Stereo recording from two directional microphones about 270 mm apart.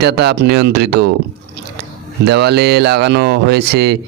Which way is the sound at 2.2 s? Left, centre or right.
Right.